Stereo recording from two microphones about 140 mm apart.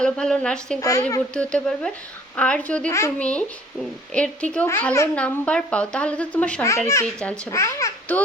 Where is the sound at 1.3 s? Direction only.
5° left (ahead or behind).